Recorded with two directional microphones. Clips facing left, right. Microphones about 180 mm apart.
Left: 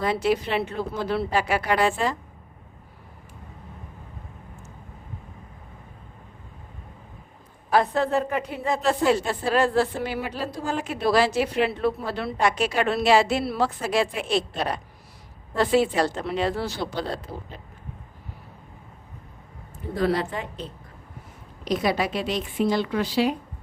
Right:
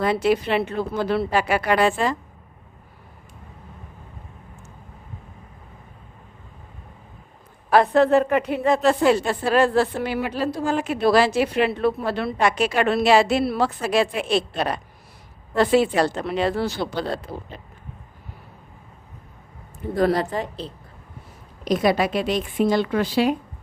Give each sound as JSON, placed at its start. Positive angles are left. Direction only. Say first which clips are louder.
{"t": 0.0, "sound": "a woman's voice", "louder": "right 3 dB", "side_deg": -65}
{"t": 7.7, "sound": "a woman's voice", "louder": "right 6 dB", "side_deg": -65}
{"t": 20.0, "sound": "a woman's voice", "louder": "right 4 dB", "side_deg": -40}
{"t": 21.6, "sound": "a woman's voice", "louder": "right 4 dB", "side_deg": -50}